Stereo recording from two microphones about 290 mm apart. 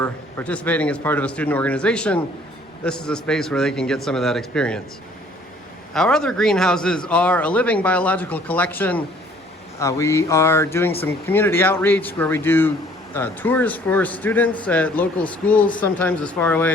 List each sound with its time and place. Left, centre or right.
0.0 s a man's voice: centre
5.9 s a man's voice: centre